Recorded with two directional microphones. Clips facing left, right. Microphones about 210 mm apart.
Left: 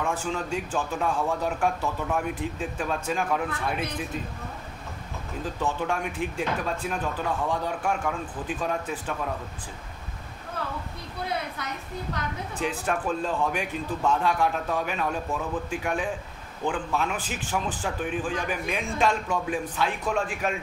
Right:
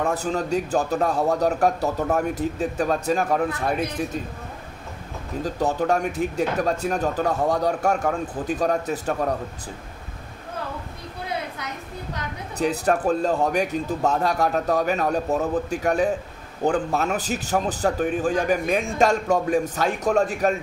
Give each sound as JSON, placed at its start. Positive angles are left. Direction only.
{"t": 0.0, "sound": "speech", "side_deg": -40}
{"t": 5.4, "sound": "speech", "side_deg": -40}
{"t": 12.5, "sound": "speech", "side_deg": -40}